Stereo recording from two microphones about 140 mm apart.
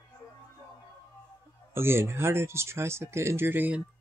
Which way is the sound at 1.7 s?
15° right (ahead or behind).